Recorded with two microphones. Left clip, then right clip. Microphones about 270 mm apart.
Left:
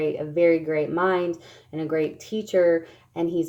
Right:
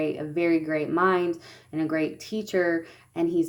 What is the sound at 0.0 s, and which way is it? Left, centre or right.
Speech, right.